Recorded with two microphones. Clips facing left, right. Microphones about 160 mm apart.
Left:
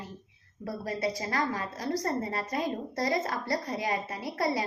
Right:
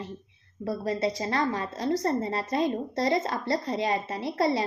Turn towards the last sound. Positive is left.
turn(degrees=-25)  # may be behind; listen again after turning